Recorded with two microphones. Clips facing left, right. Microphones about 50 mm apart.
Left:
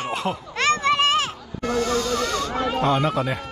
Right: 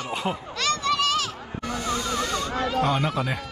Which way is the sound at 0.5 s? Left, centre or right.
Left.